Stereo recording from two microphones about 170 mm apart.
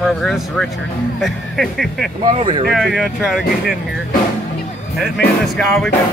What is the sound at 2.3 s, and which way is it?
Speech, 25° right (ahead or behind).